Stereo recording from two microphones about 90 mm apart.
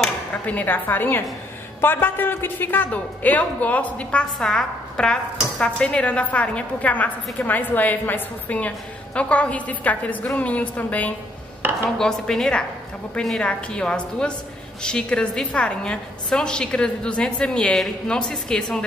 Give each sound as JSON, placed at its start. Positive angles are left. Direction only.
{"t": 0.3, "sound": "a woman's voice", "side_deg": 15}
{"t": 11.6, "sound": "dishes", "side_deg": -20}
{"t": 12.0, "sound": "a woman's voice", "side_deg": 5}